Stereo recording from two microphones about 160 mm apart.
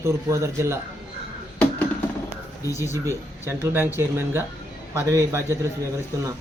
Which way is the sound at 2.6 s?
20° left (ahead or behind).